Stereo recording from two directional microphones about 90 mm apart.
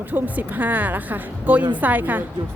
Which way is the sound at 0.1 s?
20° right (ahead or behind).